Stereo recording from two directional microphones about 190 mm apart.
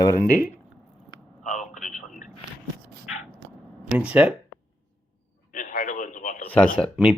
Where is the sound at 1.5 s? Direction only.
40° left (ahead or behind).